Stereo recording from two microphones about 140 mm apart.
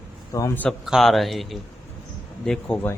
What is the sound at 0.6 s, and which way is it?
A man's voice, centre (ahead or behind).